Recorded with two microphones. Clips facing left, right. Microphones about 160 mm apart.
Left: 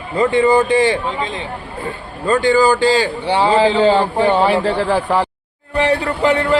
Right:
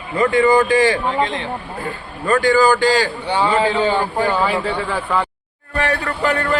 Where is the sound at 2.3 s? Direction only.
20° left (ahead or behind).